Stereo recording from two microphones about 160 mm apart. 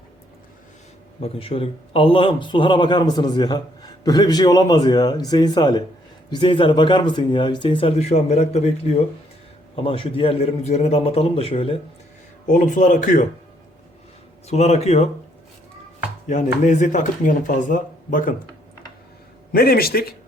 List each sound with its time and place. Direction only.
1.2 s a man's voice: 35° left (ahead or behind)
9.7 s a man's voice: 35° left (ahead or behind)
12.5 s speech: 55° left (ahead or behind)
14.4 s a man's voice: 40° left (ahead or behind)
16.2 s speech: 50° left (ahead or behind)
19.5 s speech: 70° left (ahead or behind)